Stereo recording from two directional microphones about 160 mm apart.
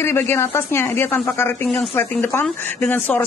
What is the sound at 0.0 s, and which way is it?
A woman's voice, 15° left (ahead or behind).